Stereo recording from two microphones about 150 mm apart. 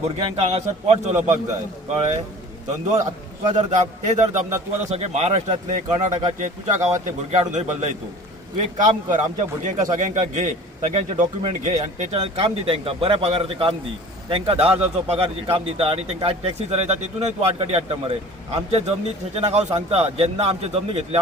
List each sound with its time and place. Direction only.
0.3 s speech: 45° right (ahead or behind)
3.4 s a man's voice: 50° right (ahead or behind)